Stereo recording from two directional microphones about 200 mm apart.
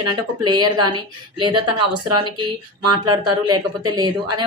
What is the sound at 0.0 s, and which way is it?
Speech, 20° right (ahead or behind).